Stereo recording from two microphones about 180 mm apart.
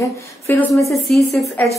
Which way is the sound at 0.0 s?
15° left (ahead or behind).